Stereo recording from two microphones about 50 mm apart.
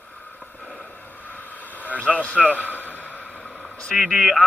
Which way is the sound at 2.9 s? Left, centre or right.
Left.